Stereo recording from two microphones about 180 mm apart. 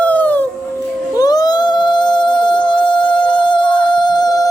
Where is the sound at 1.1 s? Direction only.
20° left (ahead or behind).